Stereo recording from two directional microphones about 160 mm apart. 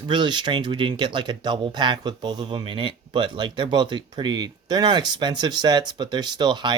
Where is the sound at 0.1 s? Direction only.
30° right (ahead or behind).